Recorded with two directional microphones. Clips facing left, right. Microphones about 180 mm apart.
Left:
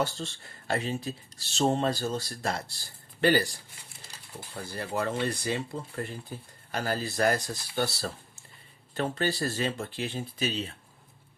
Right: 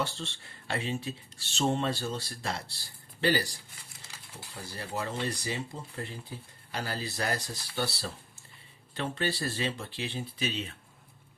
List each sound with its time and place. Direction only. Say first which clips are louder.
0.0 s speech: left 4 dB; 40° left (ahead or behind)